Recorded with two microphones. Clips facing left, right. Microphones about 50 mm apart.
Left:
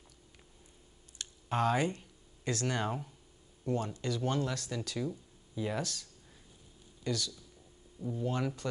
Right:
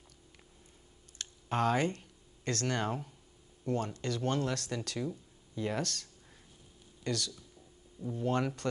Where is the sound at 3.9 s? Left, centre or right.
Right.